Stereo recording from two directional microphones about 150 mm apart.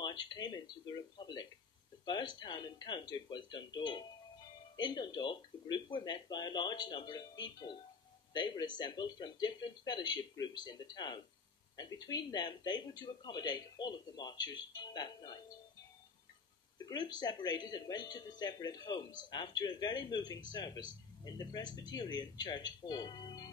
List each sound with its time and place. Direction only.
0.0 s speech: 30° left (ahead or behind)
16.7 s speech: 30° left (ahead or behind)